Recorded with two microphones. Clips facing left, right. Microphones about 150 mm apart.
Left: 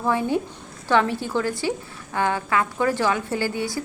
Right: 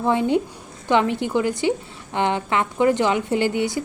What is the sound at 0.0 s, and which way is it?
A woman's voice, 20° right (ahead or behind).